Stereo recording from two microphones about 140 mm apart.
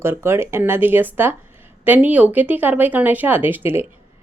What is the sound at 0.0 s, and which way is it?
Speech, 15° right (ahead or behind).